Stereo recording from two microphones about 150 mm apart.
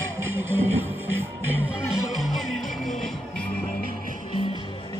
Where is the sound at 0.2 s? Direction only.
15° right (ahead or behind).